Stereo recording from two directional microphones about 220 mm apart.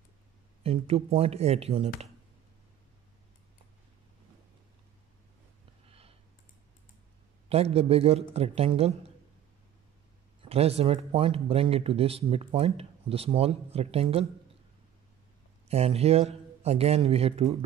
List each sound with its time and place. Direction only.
0.7 s speech: 25° right (ahead or behind)
5.9 s clicking: 25° right (ahead or behind)
7.4 s speech: 25° right (ahead or behind)
10.4 s speech: 25° right (ahead or behind)
15.7 s speech: 30° right (ahead or behind)